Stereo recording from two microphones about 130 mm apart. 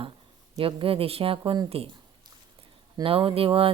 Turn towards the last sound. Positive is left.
turn(degrees=-45)  # may be behind; listen again after turning